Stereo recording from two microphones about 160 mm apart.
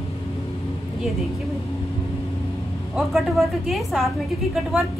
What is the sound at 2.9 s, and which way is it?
A woman's voice, centre (ahead or behind).